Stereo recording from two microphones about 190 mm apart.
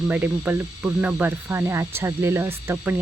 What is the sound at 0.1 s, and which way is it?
Speech, 10° right (ahead or behind).